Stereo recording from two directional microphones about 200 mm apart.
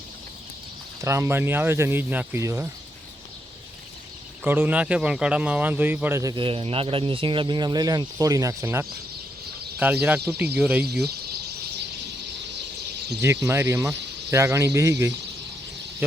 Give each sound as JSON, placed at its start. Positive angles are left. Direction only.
{"t": 1.0, "sound": "speech", "side_deg": -15}
{"t": 4.4, "sound": "speech", "side_deg": -10}
{"t": 10.8, "sound": "bird", "side_deg": -55}
{"t": 13.2, "sound": "speech", "side_deg": -15}